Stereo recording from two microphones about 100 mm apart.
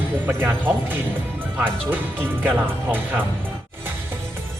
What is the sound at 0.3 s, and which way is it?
Speech, 20° right (ahead or behind).